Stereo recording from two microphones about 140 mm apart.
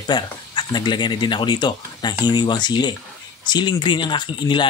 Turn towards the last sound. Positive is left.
turn(degrees=35)  # may be behind; listen again after turning